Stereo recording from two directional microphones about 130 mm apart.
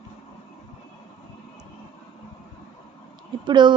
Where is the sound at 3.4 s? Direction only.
35° right (ahead or behind).